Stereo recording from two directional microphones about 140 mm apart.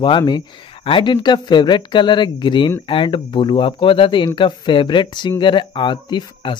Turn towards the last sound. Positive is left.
turn(degrees=35)  # may be behind; listen again after turning